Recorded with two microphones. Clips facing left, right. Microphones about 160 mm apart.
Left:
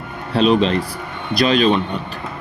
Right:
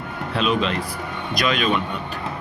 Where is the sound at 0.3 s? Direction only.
35° left (ahead or behind).